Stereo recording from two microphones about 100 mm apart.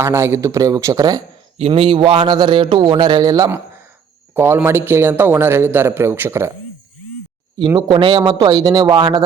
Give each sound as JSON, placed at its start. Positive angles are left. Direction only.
{"t": 0.0, "sound": "a man's voice", "side_deg": -25}
{"t": 1.5, "sound": "speech", "side_deg": -80}
{"t": 4.4, "sound": "a man's voice", "side_deg": -25}
{"t": 7.8, "sound": "speech", "side_deg": -55}
{"t": 8.2, "sound": "speech", "side_deg": -40}